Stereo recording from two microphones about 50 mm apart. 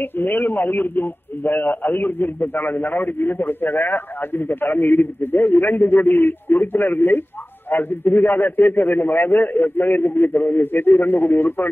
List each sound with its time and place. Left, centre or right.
0.0 s speech: left